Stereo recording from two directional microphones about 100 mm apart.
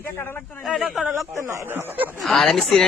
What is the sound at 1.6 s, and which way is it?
Speech, 20° right (ahead or behind).